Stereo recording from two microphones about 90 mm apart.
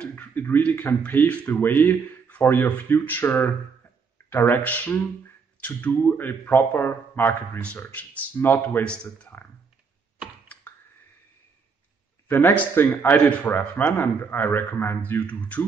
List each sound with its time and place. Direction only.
0.3 s speech: 20° left (ahead or behind)
8.8 s speech: 10° left (ahead or behind)
12.3 s speech: 25° left (ahead or behind)